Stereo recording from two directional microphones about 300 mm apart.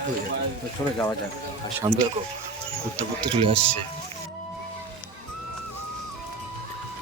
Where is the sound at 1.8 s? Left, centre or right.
Centre.